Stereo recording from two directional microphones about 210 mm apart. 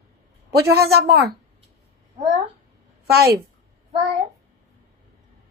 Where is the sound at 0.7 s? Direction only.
50° right (ahead or behind).